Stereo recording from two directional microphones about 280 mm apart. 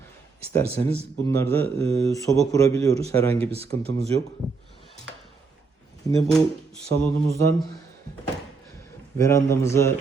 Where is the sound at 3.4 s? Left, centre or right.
Right.